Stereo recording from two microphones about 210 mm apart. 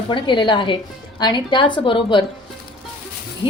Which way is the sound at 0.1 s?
25° left (ahead or behind).